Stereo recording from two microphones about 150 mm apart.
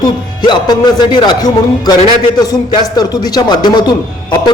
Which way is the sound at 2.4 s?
25° left (ahead or behind).